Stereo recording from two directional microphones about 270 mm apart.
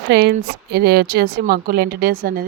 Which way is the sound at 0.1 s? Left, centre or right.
Right.